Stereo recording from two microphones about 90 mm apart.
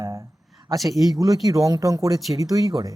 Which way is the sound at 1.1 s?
40° right (ahead or behind).